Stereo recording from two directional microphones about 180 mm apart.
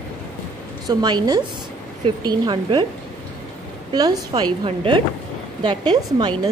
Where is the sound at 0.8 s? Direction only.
20° right (ahead or behind).